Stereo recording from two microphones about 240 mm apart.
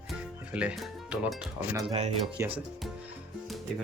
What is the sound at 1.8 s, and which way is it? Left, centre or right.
Speech, right.